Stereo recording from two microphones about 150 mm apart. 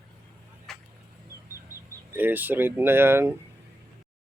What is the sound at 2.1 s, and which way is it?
Speech, 10° right (ahead or behind).